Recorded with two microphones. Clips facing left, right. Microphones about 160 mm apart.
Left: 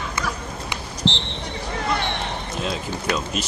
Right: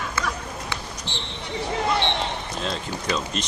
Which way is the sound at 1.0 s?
25° left (ahead or behind).